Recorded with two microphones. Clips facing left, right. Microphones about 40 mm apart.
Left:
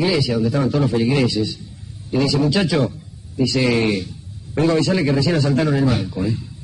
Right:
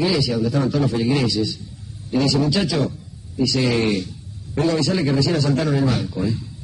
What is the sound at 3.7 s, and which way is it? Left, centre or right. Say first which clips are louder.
Speech: left 1 dB; centre.